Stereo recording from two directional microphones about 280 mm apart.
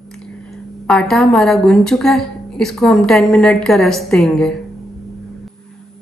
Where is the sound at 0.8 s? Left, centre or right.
Centre.